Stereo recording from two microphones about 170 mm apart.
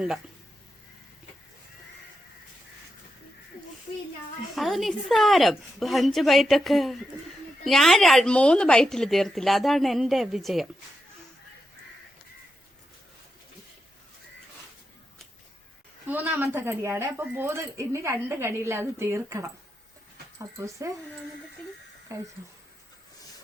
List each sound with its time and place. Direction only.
4.5 s a woman's voice: centre (ahead or behind)
16.0 s speech: 10° right (ahead or behind)
22.1 s speech: 15° right (ahead or behind)